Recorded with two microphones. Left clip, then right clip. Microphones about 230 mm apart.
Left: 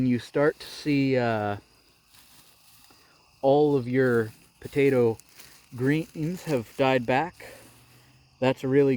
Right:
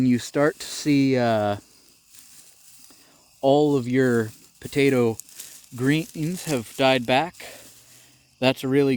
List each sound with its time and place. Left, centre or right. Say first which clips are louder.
0.0 s speech: right 3 dB; right
3.4 s speech: right 2 dB; right